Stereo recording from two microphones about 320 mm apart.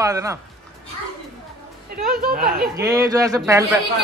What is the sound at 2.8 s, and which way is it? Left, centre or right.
A man's voice, centre.